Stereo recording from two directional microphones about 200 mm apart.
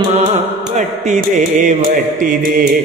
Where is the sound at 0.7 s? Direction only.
35° right (ahead or behind).